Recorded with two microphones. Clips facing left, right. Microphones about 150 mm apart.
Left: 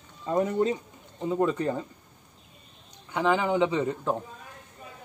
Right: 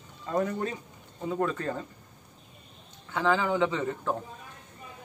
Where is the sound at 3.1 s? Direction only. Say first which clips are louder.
Left 2 dB; 15° left (ahead or behind).